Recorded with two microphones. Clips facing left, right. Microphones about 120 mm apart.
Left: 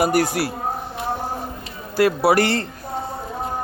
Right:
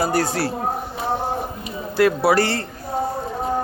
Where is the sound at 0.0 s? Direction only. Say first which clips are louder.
Left 2 dB; 15° left (ahead or behind).